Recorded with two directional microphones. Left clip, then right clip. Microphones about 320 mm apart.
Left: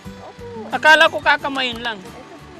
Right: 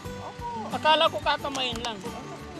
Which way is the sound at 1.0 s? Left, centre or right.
Left.